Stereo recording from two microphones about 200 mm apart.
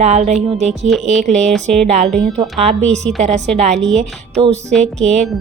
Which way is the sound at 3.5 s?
35° right (ahead or behind).